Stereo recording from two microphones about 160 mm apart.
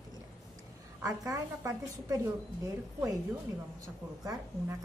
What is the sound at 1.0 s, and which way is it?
A woman's voice, 20° right (ahead or behind).